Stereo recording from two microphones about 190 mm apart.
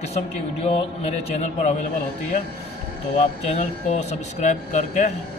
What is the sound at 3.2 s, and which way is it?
A man's voice, 35° left (ahead or behind).